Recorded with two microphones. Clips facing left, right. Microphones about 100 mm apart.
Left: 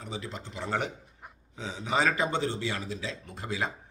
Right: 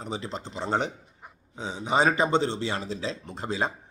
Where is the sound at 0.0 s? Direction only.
30° right (ahead or behind).